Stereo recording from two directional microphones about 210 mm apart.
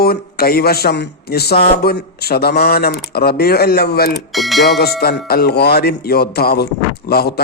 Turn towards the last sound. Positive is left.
turn(degrees=50)  # may be behind; listen again after turning